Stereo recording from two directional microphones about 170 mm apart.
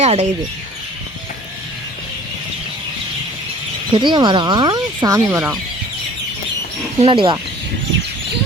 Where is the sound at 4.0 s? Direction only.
25° right (ahead or behind).